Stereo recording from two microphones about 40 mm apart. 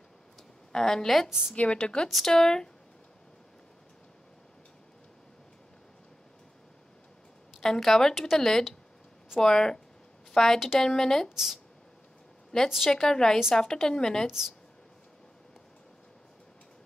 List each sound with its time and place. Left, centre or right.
0.7 s a woman's voice: centre
1.5 s a woman's voice: left
2.0 s speech: centre
2.3 s a woman's voice: centre
7.6 s a woman's voice: centre
8.1 s speech: centre
8.4 s a woman's voice: centre
11.2 s speech: centre
12.6 s speech: centre
12.9 s a woman's voice: centre
14.2 s speech: centre